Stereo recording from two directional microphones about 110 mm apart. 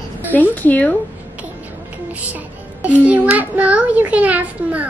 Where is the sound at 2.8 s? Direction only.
15° right (ahead or behind).